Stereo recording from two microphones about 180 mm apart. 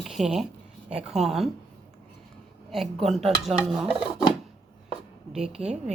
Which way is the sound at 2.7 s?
Centre (ahead or behind).